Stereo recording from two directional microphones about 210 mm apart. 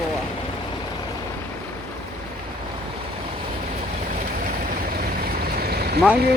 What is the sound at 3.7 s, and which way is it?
Vehicle, 35° right (ahead or behind).